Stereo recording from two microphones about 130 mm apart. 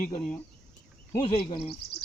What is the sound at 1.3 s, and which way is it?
Speech, 45° left (ahead or behind).